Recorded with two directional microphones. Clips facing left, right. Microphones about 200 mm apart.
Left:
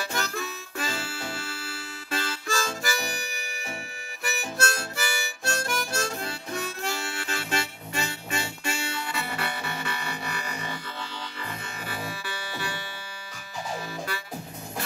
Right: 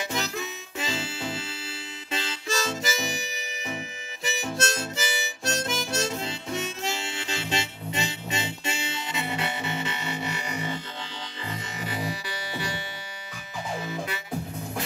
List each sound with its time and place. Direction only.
0.0 s harmonica: 20° right (ahead or behind)
11.8 s music: 20° right (ahead or behind)
13.8 s music: 20° right (ahead or behind)